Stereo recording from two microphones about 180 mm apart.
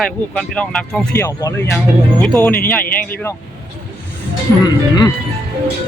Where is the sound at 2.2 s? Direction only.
Centre (ahead or behind).